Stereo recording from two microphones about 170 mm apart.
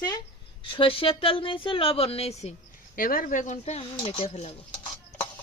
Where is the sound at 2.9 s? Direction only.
55° left (ahead or behind); by 4.5 s 40° left (ahead or behind).